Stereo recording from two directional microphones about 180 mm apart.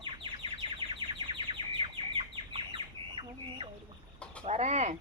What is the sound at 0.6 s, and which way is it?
Bird, 25° right (ahead or behind).